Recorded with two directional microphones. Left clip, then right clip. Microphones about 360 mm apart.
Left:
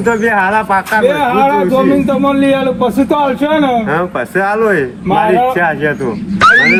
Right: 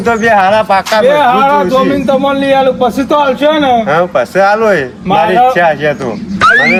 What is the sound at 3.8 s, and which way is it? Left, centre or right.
Speech, right.